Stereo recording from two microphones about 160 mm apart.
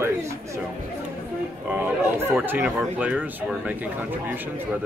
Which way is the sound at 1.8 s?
15° right (ahead or behind).